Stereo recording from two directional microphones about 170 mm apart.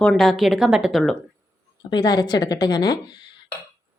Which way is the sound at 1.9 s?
25° left (ahead or behind).